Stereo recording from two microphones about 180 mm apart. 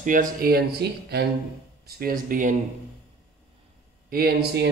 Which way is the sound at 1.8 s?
55° right (ahead or behind).